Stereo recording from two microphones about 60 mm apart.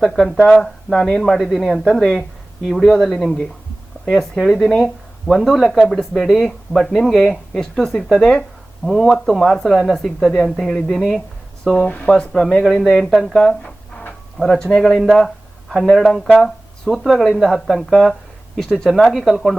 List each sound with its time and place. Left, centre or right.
0.0 s speech: centre
3.0 s speech: centre
4.0 s speech: centre
11.6 s speech: centre
12.0 s speech: centre